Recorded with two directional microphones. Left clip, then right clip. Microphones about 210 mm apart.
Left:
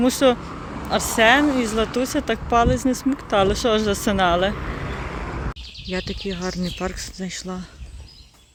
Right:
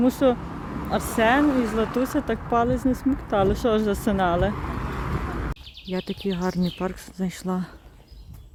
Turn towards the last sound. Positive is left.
turn(degrees=-20)  # may be behind; listen again after turning